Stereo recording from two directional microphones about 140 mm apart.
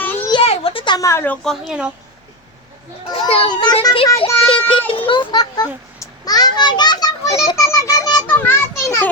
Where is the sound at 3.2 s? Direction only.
45° left (ahead or behind).